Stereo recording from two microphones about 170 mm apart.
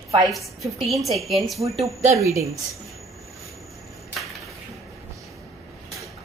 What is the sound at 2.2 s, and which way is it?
Speech, 15° right (ahead or behind).